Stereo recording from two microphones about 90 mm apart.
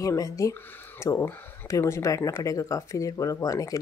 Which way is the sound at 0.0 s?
40° left (ahead or behind).